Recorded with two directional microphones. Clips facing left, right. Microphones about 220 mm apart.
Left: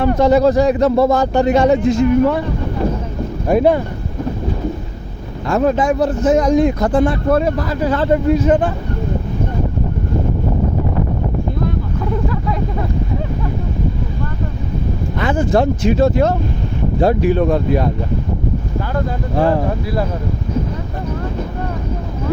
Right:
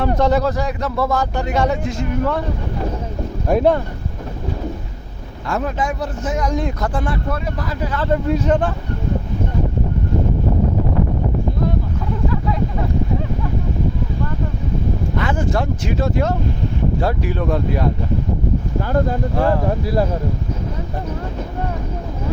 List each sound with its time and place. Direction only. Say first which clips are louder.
0.2 s speech: left 8 dB; 15° left (ahead or behind)
3.4 s speech: left 2 dB; 5° left (ahead or behind)
5.5 s speech: left 7 dB; 30° left (ahead or behind)
6.6 s speech: left 9 dB; 15° left (ahead or behind)
7.3 s speech: left 9 dB; 35° left (ahead or behind)
8.3 s speech: left 4 dB; 5° left (ahead or behind)
15.2 s speech: left 8 dB; 25° left (ahead or behind)